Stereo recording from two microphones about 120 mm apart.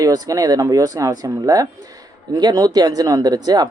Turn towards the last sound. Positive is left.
turn(degrees=-35)  # may be behind; listen again after turning